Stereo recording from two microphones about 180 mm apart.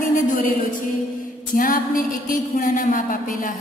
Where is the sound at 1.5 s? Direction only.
50° left (ahead or behind).